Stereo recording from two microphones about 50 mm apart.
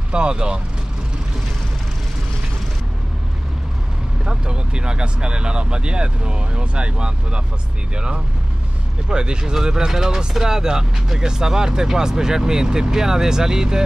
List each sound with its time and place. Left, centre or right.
0.1 s speech: centre
4.3 s speech: centre